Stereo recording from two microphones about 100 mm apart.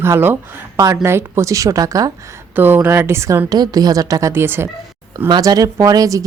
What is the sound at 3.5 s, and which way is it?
A woman's voice, 40° right (ahead or behind).